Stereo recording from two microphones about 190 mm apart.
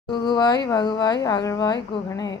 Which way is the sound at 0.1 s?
20° left (ahead or behind).